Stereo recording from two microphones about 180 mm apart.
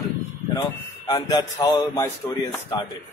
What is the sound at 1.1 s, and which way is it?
Speech, 20° left (ahead or behind).